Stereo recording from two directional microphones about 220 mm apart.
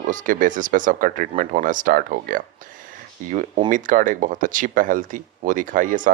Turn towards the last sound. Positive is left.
turn(degrees=-35)  # may be behind; listen again after turning